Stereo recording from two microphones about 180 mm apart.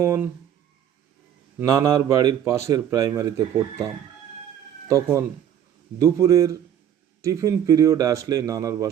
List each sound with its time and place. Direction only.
0.0 s speech: 15° right (ahead or behind)
1.5 s a man's voice: 15° right (ahead or behind)
4.9 s a man's voice: 15° right (ahead or behind)